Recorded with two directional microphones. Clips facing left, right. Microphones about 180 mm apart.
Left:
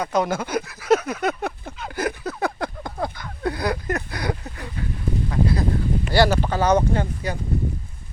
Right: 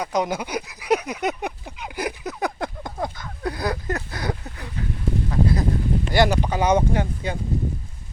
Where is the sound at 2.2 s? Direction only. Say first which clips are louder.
Left 1 dB; 20° right (ahead or behind).